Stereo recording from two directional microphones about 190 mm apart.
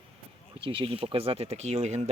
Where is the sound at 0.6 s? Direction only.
25° right (ahead or behind).